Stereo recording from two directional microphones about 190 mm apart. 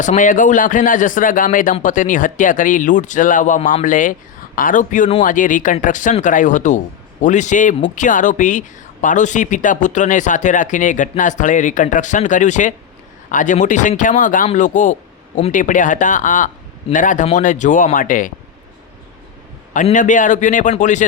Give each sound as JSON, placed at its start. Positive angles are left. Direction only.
{"t": 0.0, "sound": "speech", "side_deg": 40}
{"t": 19.7, "sound": "speech", "side_deg": 40}